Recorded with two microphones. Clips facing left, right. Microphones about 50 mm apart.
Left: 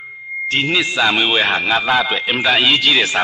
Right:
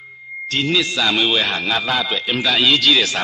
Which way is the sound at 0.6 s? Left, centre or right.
Left.